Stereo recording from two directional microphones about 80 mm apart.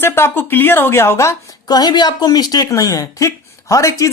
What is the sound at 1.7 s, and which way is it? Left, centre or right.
Speech, left.